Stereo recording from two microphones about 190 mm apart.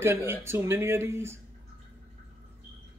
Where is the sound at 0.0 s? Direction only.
10° right (ahead or behind).